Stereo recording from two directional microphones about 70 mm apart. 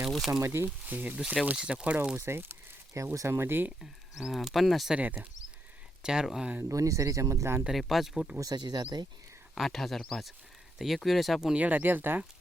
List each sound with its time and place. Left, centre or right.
0.4 s speech: right
0.9 s speech: right
1.1 s speech: centre
2.1 s speech: right
2.9 s speech: right
4.2 s speech: centre
4.9 s speech: right
6.0 s speech: centre
6.6 s speech: right
7.7 s speech: centre
8.4 s speech: right
9.6 s speech: centre
11.5 s speech: right